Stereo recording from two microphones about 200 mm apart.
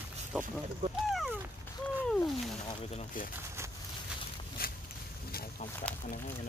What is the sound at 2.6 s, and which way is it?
Speech, 30° left (ahead or behind).